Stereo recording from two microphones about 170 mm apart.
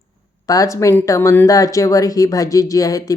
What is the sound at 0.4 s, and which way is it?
Speech, 20° left (ahead or behind).